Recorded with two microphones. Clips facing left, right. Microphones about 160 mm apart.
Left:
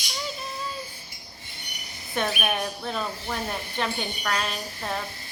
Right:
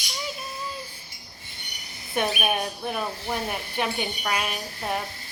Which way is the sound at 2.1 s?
15° right (ahead or behind).